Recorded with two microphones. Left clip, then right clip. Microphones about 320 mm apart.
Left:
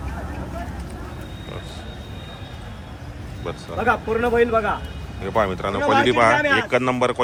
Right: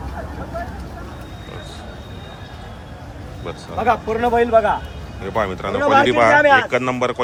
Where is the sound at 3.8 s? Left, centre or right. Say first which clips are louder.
Right 2 dB; right.